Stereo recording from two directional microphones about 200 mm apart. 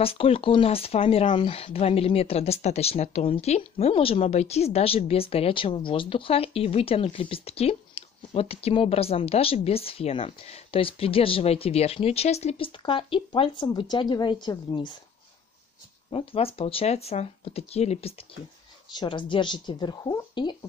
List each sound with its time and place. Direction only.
0.0 s speech: 30° left (ahead or behind)
16.1 s speech: 25° left (ahead or behind)